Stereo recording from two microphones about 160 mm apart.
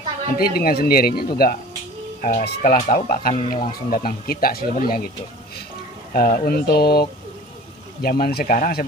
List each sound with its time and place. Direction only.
0.4 s speech: 70° left (ahead or behind)
2.2 s speech: 55° left (ahead or behind)
6.1 s speech: 65° left (ahead or behind)
8.0 s speech: 65° left (ahead or behind)